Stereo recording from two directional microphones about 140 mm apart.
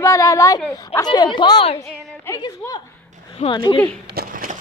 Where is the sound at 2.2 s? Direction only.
25° left (ahead or behind).